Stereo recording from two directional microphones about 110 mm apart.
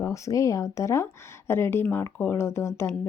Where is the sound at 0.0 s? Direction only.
30° left (ahead or behind).